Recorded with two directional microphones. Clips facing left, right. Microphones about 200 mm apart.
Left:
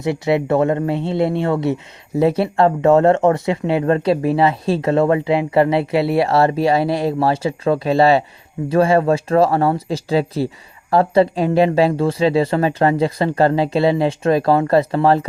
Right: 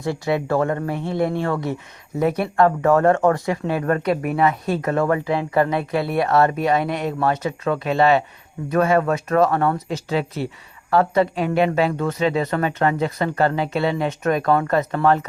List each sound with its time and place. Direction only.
0.0 s speech: 20° left (ahead or behind)